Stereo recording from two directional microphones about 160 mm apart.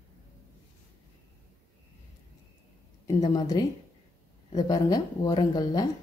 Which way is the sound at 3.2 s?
25° left (ahead or behind).